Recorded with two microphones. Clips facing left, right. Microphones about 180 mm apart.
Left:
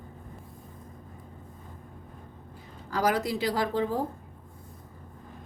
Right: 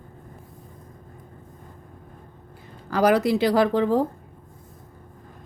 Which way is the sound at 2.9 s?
75° right (ahead or behind).